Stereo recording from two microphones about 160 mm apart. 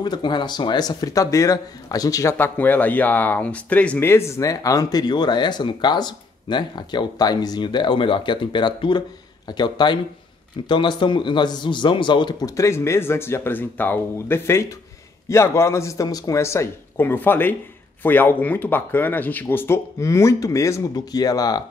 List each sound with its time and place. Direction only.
0.0 s speech: 30° left (ahead or behind)